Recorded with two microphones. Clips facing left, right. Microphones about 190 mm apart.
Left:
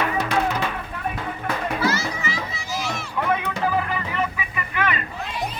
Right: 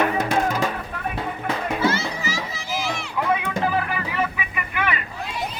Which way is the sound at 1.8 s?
30° right (ahead or behind).